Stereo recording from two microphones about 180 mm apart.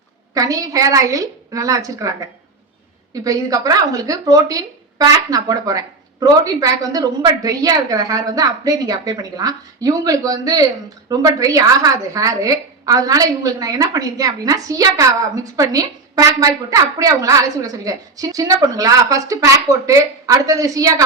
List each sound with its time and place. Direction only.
0.3 s a woman's voice: 20° right (ahead or behind)